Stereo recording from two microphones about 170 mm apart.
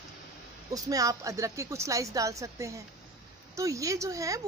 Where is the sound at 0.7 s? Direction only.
20° right (ahead or behind).